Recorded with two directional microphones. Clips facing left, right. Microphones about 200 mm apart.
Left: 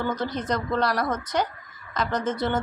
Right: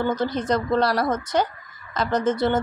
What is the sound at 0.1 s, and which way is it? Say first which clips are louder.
A woman's voice: right 4 dB; 30° right (ahead or behind).